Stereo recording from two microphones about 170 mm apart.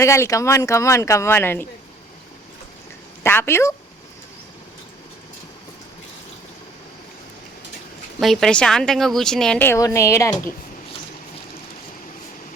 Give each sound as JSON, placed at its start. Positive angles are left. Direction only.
{"t": 0.0, "sound": "speech", "side_deg": 15}
{"t": 3.2, "sound": "speech", "side_deg": 15}
{"t": 8.2, "sound": "a woman's voice", "side_deg": 0}